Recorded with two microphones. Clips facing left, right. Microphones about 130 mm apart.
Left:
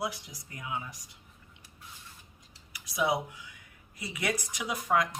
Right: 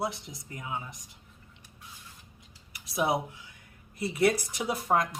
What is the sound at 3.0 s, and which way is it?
Speech, 25° right (ahead or behind).